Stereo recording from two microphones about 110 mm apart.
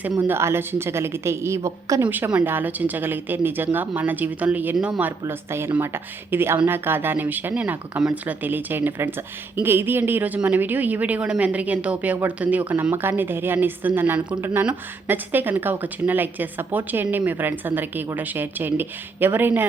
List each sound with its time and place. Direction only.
0.2 s speech: 20° right (ahead or behind)
5.2 s speech: 25° right (ahead or behind)